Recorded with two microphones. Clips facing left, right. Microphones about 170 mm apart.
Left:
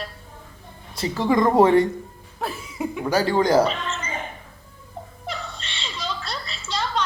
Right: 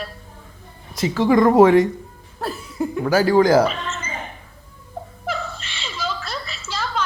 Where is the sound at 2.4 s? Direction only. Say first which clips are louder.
Right 3 dB; centre (ahead or behind).